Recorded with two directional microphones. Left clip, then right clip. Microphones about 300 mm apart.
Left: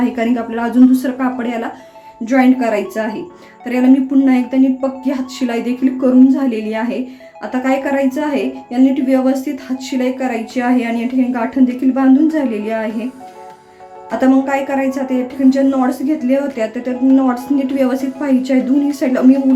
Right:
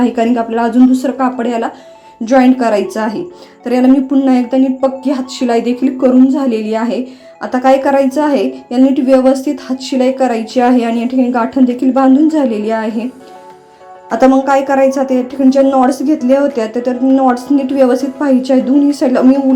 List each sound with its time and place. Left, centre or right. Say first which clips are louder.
0.0 s a woman's voice: right 5 dB; centre
14.2 s a woman's voice: right 5 dB; centre